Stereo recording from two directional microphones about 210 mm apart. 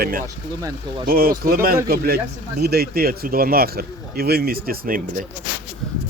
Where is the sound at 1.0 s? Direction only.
45° right (ahead or behind).